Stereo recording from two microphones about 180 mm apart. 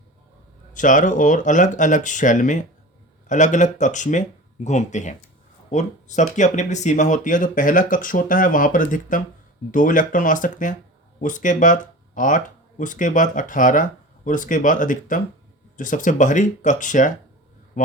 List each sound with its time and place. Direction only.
0.7 s speech: 45° left (ahead or behind)